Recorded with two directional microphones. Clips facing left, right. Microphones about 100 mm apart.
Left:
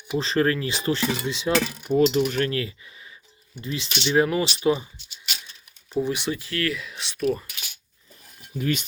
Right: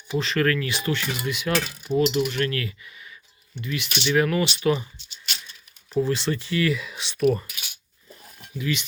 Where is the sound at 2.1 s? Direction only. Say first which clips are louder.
Left 1 dB; 40° left (ahead or behind).